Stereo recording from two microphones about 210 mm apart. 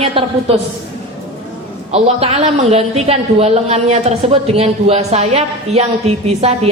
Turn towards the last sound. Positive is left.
turn(degrees=-30)  # may be behind; listen again after turning